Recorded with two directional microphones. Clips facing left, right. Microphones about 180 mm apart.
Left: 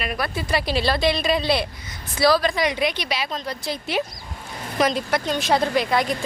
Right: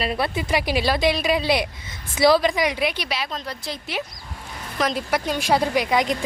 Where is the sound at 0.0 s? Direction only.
25° right (ahead or behind).